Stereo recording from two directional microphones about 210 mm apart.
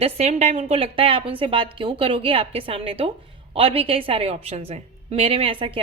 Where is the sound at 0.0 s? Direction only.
30° right (ahead or behind).